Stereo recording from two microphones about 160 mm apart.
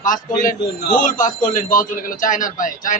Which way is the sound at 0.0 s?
55° left (ahead or behind).